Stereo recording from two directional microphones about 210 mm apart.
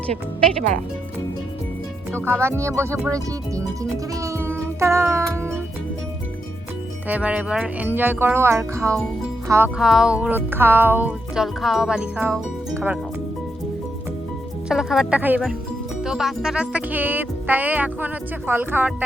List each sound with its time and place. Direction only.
2.2 s speech: 10° right (ahead or behind)
3.5 s music: 15° right (ahead or behind)
7.1 s speech: 5° right (ahead or behind)
14.7 s speech: centre (ahead or behind)